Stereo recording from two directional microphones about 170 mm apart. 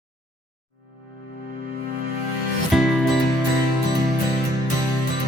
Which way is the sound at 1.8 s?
70° right (ahead or behind).